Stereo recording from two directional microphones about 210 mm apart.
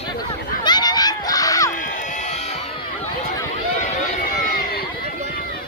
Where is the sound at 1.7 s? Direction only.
35° left (ahead or behind).